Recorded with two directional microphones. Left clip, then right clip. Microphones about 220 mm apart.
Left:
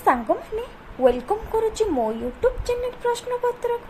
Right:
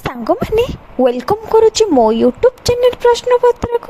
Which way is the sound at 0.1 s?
45° right (ahead or behind).